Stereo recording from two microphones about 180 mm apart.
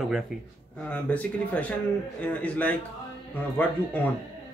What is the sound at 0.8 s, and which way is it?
Speech, 10° left (ahead or behind).